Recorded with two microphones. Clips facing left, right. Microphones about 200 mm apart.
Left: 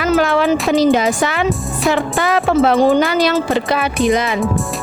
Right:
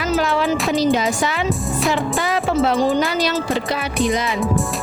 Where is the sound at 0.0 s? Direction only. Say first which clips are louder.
Left 5 dB; 60° left (ahead or behind).